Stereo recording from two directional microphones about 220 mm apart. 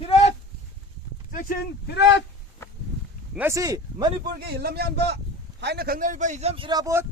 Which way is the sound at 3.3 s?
10° right (ahead or behind).